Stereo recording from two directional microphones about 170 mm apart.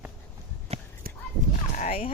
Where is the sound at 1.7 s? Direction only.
45° left (ahead or behind).